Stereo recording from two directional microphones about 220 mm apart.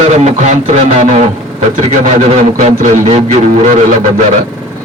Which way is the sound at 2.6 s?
35° right (ahead or behind).